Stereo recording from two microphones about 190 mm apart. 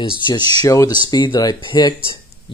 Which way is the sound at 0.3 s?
25° left (ahead or behind).